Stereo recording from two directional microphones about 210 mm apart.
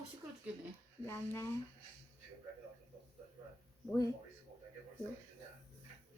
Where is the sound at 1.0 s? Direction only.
10° left (ahead or behind).